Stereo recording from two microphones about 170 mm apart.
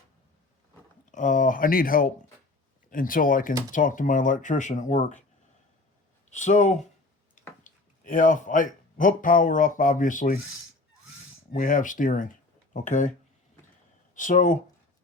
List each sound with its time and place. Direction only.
1.1 s speech: 50° left (ahead or behind)
6.3 s speech: 45° left (ahead or behind)
11.5 s speech: 55° left (ahead or behind)
14.2 s speech: 50° left (ahead or behind)